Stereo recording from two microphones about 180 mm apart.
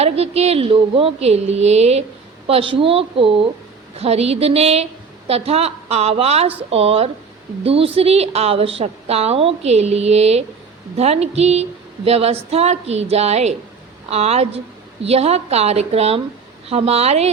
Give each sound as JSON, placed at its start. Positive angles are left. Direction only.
{"t": 0.0, "sound": "a woman's voice", "side_deg": -35}